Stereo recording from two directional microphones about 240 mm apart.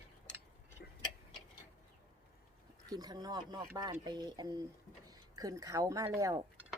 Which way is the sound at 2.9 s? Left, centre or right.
Centre.